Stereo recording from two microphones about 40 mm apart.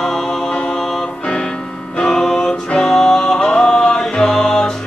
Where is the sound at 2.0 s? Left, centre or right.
Centre.